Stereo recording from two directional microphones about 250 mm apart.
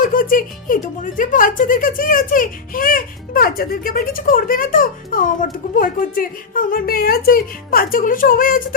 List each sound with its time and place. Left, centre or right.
0.0 s speech: left